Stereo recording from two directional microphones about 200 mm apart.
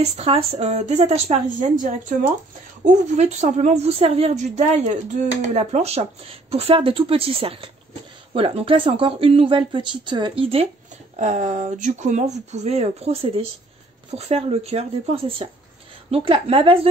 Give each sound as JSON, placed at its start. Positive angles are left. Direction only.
{"t": 0.0, "sound": "speech", "side_deg": -30}